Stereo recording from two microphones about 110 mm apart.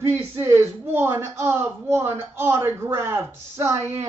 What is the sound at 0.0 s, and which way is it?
Speech, 20° right (ahead or behind).